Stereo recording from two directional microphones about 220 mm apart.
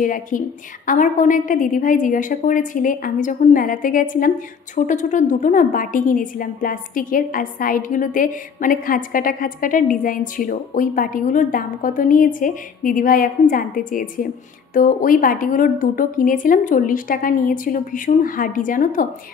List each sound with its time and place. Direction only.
0.0 s a woman's voice: 35° left (ahead or behind)